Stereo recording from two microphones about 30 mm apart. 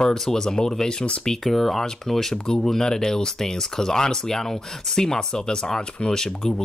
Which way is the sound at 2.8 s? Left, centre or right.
Left.